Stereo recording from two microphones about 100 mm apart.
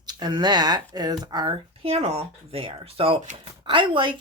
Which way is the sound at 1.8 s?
70° right (ahead or behind).